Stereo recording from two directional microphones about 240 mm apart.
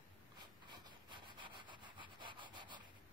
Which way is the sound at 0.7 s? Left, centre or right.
Centre.